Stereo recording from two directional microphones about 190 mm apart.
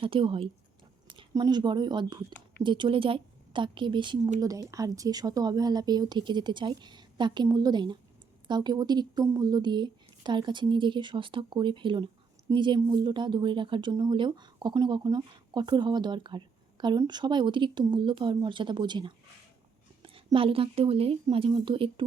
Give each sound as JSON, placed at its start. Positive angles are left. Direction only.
{"t": 0.0, "sound": "a woman's voice", "side_deg": -25}